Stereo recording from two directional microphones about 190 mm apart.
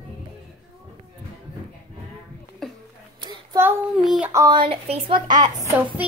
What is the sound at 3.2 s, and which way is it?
Child singing, 25° right (ahead or behind).